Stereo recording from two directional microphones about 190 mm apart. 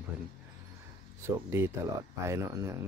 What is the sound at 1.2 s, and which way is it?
Speech, 15° right (ahead or behind).